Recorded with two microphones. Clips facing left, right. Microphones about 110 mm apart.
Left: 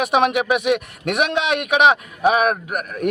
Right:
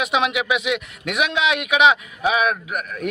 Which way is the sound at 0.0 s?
50° left (ahead or behind).